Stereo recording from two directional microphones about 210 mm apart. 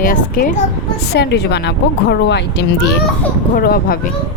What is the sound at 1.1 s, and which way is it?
Speech, 50° left (ahead or behind).